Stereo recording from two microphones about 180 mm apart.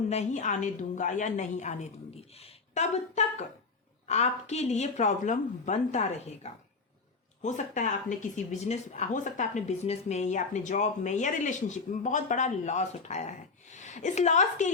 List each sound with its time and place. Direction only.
0.1 s a woman's voice: 40° left (ahead or behind)